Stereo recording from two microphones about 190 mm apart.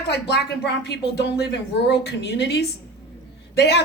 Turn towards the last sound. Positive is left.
turn(degrees=60)  # may be behind; listen again after turning